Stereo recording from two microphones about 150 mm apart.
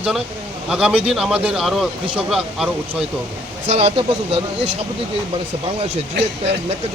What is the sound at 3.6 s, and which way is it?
Speech, 45° right (ahead or behind).